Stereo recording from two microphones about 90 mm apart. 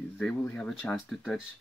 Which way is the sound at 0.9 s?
Centre (ahead or behind).